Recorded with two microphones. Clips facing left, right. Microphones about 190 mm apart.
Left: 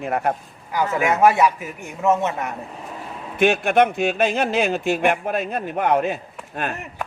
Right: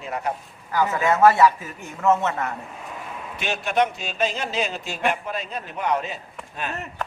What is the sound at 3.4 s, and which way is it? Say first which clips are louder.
A man's voice: left 7 dB; 55° left (ahead or behind).